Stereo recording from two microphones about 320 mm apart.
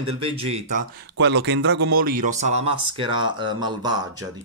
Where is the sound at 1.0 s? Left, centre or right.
Right.